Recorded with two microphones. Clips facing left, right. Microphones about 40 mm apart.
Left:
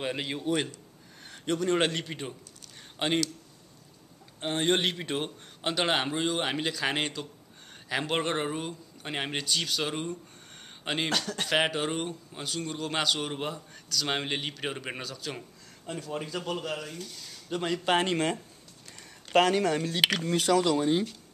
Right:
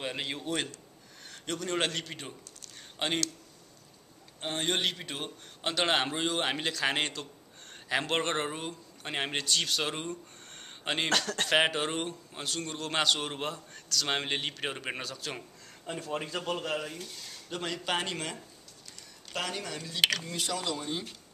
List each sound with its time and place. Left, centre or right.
0.0 s a man's voice: centre
1.3 s a man's voice: centre
4.4 s a man's voice: centre
5.6 s a man's voice: centre
17.5 s a man's voice: centre
17.8 s speech: left
19.6 s speech: left
20.0 s a man's voice: centre
20.2 s speech: left